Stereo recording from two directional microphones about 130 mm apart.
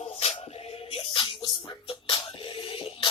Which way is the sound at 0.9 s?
45° left (ahead or behind).